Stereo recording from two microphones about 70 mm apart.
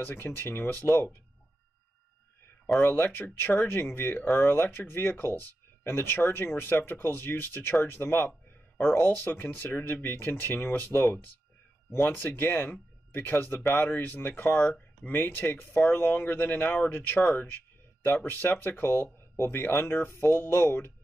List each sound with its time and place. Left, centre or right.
0.0 s speech: left
2.8 s speech: left